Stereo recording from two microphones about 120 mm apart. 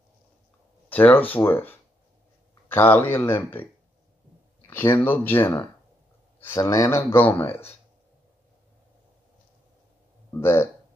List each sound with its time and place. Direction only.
0.8 s speech: 15° left (ahead or behind)
4.9 s speech: 15° left (ahead or behind)
7.0 s speech: 15° left (ahead or behind)
10.4 s speech: 20° left (ahead or behind)